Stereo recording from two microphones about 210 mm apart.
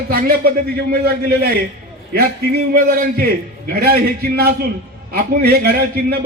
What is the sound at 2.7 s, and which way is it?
A man's voice, 45° right (ahead or behind).